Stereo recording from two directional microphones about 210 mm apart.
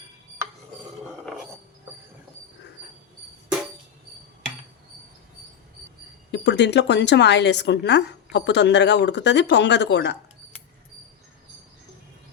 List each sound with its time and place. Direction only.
6.3 s a woman's voice: 55° left (ahead or behind)